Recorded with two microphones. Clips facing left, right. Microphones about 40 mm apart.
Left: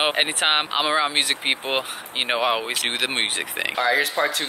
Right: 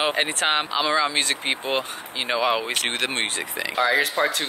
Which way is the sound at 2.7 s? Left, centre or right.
Centre.